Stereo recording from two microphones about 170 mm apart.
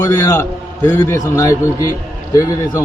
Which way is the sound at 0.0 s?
20° left (ahead or behind).